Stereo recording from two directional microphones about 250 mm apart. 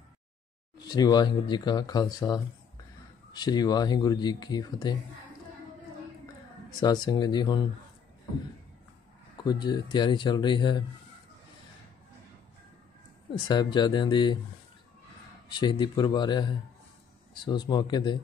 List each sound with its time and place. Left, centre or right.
0.7 s speech: centre
6.8 s speech: centre
9.4 s speech: centre
13.5 s speech: centre
15.4 s speech: centre